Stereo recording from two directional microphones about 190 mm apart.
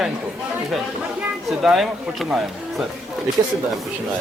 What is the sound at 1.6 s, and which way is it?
Speech, centre (ahead or behind).